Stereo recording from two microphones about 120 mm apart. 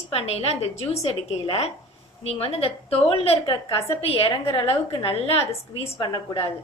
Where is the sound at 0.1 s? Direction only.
55° left (ahead or behind).